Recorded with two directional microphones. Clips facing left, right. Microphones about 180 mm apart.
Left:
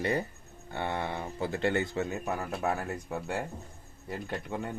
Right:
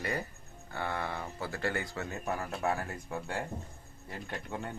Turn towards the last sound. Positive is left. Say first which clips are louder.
# left 4 dB
turn(degrees=20)  # may be behind; listen again after turning